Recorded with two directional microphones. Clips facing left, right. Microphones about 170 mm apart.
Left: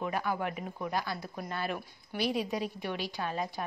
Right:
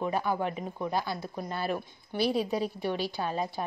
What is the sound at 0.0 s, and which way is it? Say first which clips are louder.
Speech: right 3 dB; 25° right (ahead or behind).